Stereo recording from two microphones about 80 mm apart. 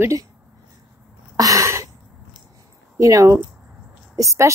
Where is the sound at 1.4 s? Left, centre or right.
Right.